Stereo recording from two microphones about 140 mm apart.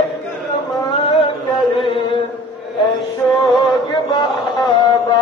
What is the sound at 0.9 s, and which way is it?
Carnatic music, 40° left (ahead or behind).